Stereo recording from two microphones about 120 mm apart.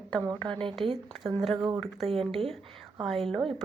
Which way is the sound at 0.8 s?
50° right (ahead or behind).